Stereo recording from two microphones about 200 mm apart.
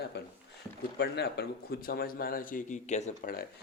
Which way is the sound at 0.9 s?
55° left (ahead or behind).